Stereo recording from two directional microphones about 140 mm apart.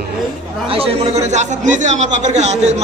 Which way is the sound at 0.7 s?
45° right (ahead or behind).